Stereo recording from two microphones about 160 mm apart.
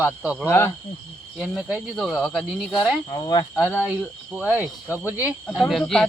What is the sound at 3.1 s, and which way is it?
Speech, 25° left (ahead or behind).